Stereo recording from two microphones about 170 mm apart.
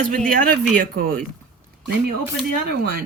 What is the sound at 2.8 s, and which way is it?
Speech, 60° right (ahead or behind).